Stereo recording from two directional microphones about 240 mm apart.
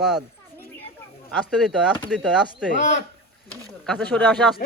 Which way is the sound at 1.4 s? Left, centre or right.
Centre.